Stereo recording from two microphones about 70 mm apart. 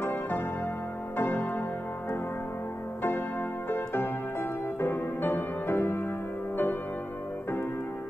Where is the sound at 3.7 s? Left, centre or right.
Left.